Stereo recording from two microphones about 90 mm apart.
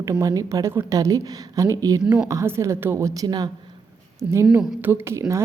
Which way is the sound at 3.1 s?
45° right (ahead or behind).